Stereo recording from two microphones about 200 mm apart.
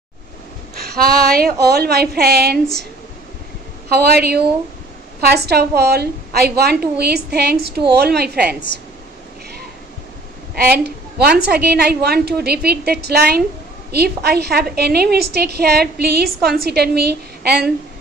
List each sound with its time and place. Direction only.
0.7 s a woman's voice: 50° right (ahead or behind)
3.9 s a woman's voice: 50° right (ahead or behind)
10.5 s a woman's voice: 50° right (ahead or behind)